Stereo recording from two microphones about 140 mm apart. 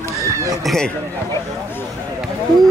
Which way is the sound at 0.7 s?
5° left (ahead or behind).